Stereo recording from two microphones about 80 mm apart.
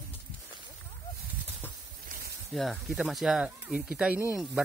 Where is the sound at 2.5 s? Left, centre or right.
Centre.